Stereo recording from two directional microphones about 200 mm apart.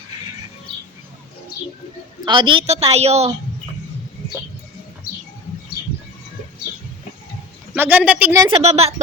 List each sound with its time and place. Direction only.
2.2 s a woman's voice: 25° right (ahead or behind)
7.8 s speech: 10° right (ahead or behind)
8.6 s a woman's voice: 30° right (ahead or behind)